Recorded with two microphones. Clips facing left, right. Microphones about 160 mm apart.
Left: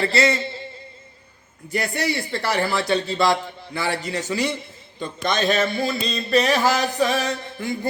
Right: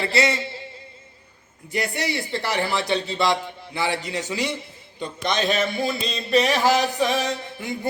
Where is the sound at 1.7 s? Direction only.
15° right (ahead or behind).